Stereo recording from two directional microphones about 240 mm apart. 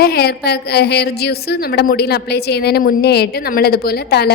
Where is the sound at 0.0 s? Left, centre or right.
Left.